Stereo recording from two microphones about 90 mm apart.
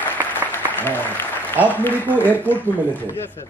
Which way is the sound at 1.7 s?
20° left (ahead or behind).